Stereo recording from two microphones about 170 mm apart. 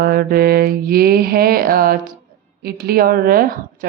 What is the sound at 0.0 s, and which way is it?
Speech, 60° right (ahead or behind).